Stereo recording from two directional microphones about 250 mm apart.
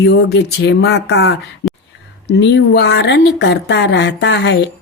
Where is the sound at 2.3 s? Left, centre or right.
Left.